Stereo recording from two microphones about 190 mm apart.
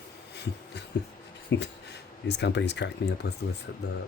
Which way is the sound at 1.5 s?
65° left (ahead or behind).